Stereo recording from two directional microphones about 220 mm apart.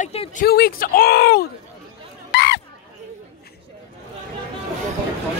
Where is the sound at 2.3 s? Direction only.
50° left (ahead or behind).